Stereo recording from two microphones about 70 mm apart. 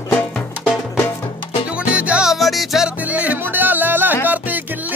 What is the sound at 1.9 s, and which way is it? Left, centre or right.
Music, centre.